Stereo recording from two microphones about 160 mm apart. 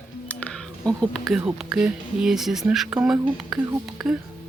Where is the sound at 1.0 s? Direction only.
Centre (ahead or behind).